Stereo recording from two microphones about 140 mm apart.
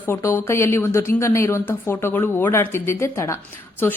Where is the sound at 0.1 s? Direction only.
20° left (ahead or behind).